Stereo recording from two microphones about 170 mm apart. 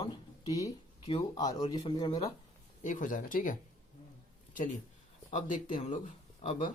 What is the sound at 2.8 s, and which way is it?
Speech, 50° left (ahead or behind).